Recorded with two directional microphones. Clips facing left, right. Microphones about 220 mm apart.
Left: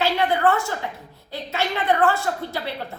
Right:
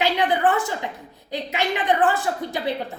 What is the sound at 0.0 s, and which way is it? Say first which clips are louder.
A woman's voice: even; 15° right (ahead or behind).